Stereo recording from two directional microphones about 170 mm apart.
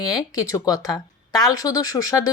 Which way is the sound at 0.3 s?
20° left (ahead or behind).